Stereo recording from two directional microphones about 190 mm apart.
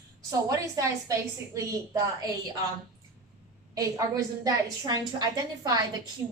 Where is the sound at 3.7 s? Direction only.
20° right (ahead or behind).